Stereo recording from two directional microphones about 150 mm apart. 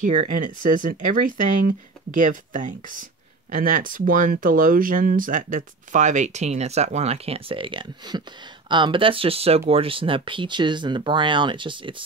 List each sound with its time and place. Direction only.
0.4 s speech: 60° right (ahead or behind); by 11.9 s 35° right (ahead or behind)